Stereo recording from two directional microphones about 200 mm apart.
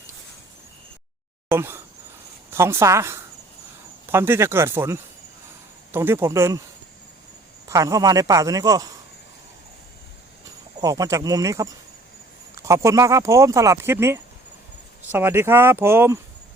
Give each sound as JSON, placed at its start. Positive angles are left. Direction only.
{"t": 1.5, "sound": "speech", "side_deg": -10}
{"t": 7.7, "sound": "speech", "side_deg": -15}
{"t": 10.8, "sound": "speech", "side_deg": -20}